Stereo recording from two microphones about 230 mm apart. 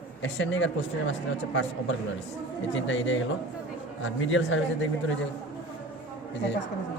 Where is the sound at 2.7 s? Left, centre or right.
Left.